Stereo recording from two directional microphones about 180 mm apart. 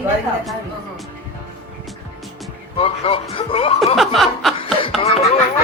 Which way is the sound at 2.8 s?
30° left (ahead or behind).